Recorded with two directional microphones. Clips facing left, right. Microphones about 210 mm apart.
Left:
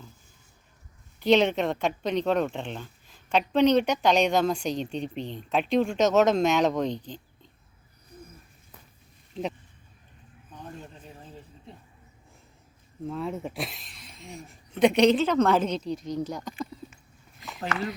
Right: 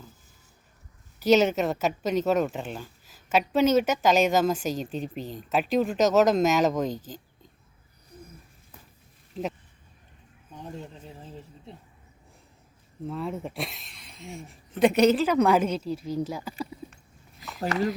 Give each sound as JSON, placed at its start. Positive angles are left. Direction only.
{"t": 1.2, "sound": "speech", "side_deg": -5}
{"t": 9.3, "sound": "speech", "side_deg": 0}
{"t": 13.1, "sound": "speech", "side_deg": 0}
{"t": 17.6, "sound": "speech", "side_deg": -40}